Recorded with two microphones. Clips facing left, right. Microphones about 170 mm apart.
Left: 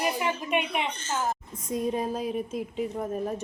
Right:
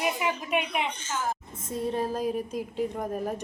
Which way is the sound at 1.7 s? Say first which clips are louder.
Left 1 dB; 15° left (ahead or behind).